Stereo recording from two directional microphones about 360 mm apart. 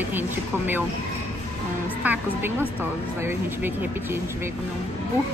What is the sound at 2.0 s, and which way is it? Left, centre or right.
Speech, centre.